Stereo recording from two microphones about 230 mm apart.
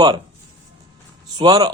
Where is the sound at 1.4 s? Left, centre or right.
Centre.